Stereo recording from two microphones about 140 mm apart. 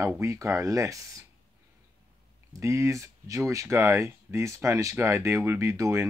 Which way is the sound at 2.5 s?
20° right (ahead or behind).